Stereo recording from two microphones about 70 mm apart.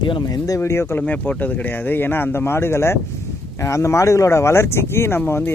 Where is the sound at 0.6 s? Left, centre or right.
Left.